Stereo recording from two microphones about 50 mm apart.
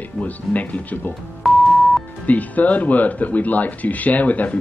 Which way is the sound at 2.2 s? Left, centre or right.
Left.